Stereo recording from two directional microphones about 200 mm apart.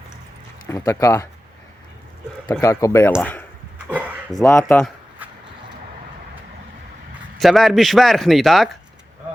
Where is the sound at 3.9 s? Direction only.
5° right (ahead or behind).